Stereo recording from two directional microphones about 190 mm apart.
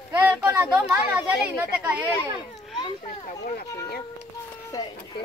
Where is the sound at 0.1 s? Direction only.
15° right (ahead or behind).